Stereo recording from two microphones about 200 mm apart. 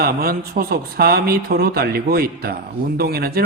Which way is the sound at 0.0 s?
50° right (ahead or behind).